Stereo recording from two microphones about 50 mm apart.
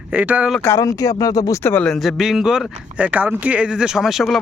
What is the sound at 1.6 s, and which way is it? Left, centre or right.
Speech, left.